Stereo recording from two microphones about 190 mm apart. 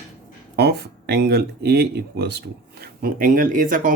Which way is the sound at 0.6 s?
60° right (ahead or behind).